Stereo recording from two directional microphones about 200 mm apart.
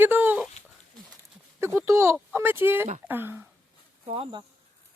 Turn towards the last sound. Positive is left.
turn(degrees=-25)  # may be behind; listen again after turning